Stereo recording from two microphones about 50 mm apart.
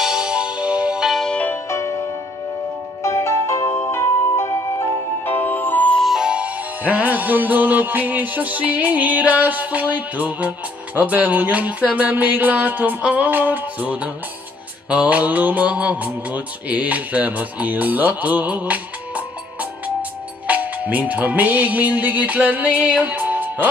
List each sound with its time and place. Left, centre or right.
0.0 s music: centre
1.7 s music: left
5.2 s music: left
6.2 s music: right
14.9 s mantra: right
23.0 s music: right